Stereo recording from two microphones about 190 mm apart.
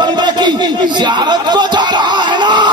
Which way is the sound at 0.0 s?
20° right (ahead or behind).